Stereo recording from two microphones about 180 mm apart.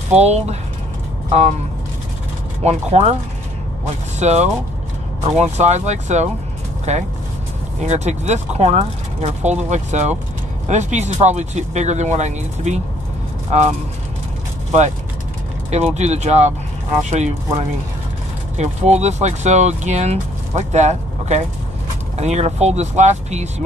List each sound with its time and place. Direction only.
0.1 s speech: 35° right (ahead or behind)
2.6 s speech: 35° right (ahead or behind)
16.0 s speech: 40° right (ahead or behind)